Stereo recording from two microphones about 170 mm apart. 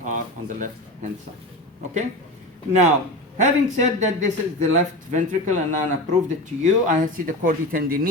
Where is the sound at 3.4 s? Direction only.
45° right (ahead or behind).